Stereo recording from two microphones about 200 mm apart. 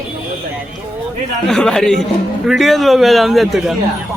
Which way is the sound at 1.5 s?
Centre (ahead or behind).